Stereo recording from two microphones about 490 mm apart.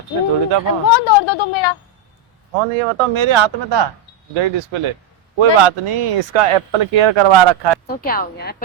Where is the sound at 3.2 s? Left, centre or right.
Right.